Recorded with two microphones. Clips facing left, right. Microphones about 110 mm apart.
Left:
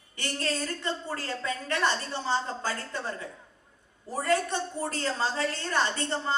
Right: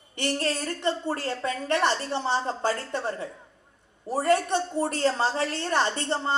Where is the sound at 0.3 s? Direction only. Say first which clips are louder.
Right 3 dB; 20° right (ahead or behind).